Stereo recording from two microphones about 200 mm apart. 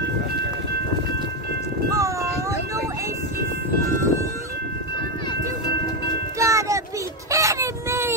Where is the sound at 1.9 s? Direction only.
15° right (ahead or behind).